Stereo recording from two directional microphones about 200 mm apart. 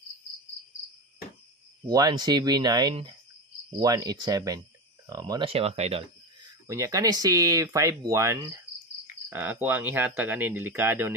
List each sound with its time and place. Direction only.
1.9 s speech: 20° right (ahead or behind)
6.7 s speech: 15° right (ahead or behind)